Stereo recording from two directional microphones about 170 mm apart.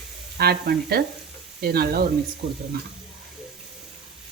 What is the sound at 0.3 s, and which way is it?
Speech, 65° right (ahead or behind).